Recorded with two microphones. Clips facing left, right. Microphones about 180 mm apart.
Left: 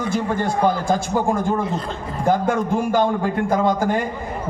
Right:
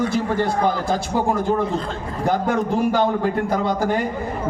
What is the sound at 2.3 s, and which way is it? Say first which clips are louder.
Speech: left 1 dB; 45° left (ahead or behind).